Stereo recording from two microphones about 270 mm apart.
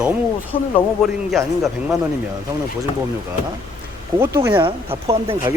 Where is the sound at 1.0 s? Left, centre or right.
Centre.